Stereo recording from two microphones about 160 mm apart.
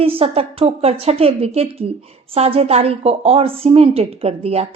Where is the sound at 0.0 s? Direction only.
35° right (ahead or behind).